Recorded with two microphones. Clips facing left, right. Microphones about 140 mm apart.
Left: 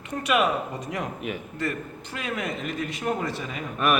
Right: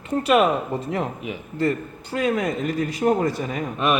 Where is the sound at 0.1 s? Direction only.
35° right (ahead or behind).